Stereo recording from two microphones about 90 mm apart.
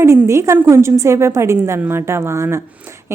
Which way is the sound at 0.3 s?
35° right (ahead or behind).